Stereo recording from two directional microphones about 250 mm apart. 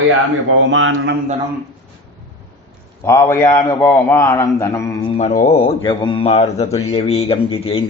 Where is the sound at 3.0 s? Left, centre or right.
Centre.